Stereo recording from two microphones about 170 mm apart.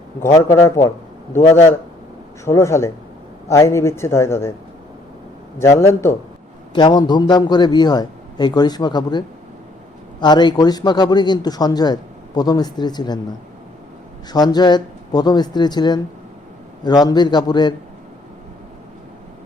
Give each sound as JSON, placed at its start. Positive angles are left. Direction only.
{"t": 0.4, "sound": "a man's voice", "side_deg": 15}
{"t": 2.4, "sound": "speech", "side_deg": 15}
{"t": 5.5, "sound": "speech", "side_deg": 15}
{"t": 6.7, "sound": "a man's voice", "side_deg": 25}
{"t": 14.3, "sound": "a man's voice", "side_deg": 25}